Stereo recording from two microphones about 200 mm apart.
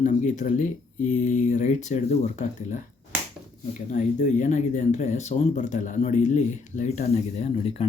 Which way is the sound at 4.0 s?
35° left (ahead or behind).